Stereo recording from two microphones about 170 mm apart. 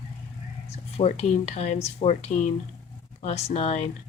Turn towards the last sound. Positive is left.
turn(degrees=40)  # may be behind; listen again after turning